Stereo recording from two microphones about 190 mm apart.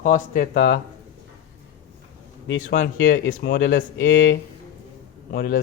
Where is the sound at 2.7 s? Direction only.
65° left (ahead or behind).